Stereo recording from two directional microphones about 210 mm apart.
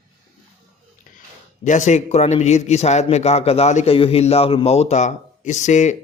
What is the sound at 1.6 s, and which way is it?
A man's voice, 35° left (ahead or behind).